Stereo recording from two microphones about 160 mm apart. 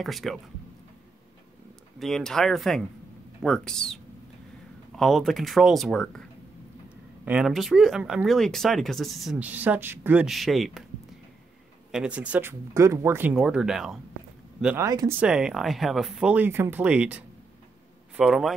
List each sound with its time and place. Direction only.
0.0 s speech: centre (ahead or behind)
2.0 s speech: centre (ahead or behind)
7.2 s speech: 5° right (ahead or behind)
11.9 s speech: 5° right (ahead or behind)
14.8 s speech: 20° right (ahead or behind)
15.1 s speech: 5° right (ahead or behind)